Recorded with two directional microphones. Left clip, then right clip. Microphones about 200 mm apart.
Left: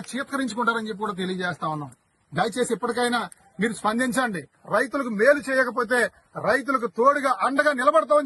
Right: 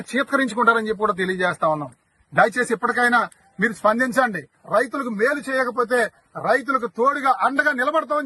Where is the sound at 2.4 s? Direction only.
5° right (ahead or behind).